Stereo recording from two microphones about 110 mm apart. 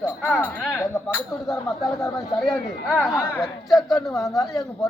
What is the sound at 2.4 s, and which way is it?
Speech, centre (ahead or behind).